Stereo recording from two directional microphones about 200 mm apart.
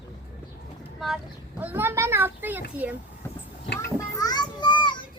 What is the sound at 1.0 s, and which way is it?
A child's voice, centre (ahead or behind).